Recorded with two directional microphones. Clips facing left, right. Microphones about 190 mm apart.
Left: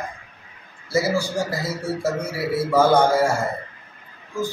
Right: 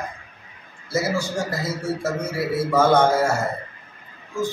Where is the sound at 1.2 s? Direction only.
25° right (ahead or behind).